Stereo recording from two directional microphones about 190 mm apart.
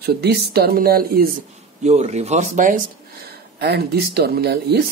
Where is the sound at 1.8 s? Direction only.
35° right (ahead or behind).